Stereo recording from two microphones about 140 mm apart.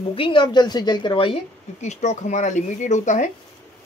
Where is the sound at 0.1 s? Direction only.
35° left (ahead or behind).